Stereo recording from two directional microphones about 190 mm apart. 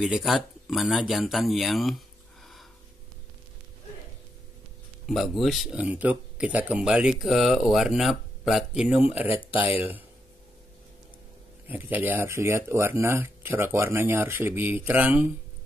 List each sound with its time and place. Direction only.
0.0 s speech: centre (ahead or behind)
5.0 s speech: centre (ahead or behind)
11.6 s speech: 10° right (ahead or behind)